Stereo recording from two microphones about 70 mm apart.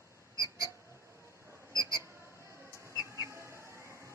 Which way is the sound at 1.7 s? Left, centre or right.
Right.